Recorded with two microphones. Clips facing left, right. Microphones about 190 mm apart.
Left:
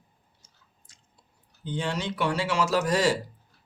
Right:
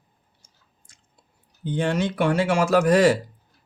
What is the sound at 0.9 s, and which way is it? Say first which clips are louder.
Chewing: right 2 dB; 50° right (ahead or behind).